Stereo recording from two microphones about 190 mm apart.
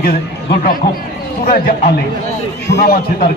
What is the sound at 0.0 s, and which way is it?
A man's voice, 55° left (ahead or behind).